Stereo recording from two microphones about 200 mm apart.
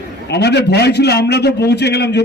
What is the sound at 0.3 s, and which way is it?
A man's voice, 55° left (ahead or behind).